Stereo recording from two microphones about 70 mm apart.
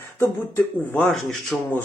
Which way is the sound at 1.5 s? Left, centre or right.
Centre.